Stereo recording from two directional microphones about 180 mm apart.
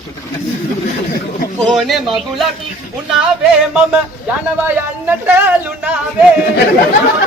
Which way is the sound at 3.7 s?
10° right (ahead or behind).